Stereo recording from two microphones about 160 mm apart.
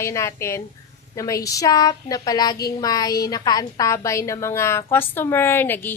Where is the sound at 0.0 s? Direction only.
20° left (ahead or behind).